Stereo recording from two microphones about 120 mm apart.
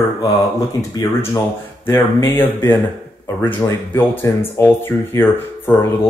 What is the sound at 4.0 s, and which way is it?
Speech, 20° left (ahead or behind).